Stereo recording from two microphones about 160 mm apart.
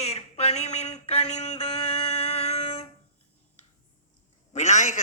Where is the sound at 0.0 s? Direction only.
40° left (ahead or behind).